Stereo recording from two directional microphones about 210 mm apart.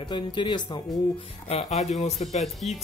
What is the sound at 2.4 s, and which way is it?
Speech, centre (ahead or behind).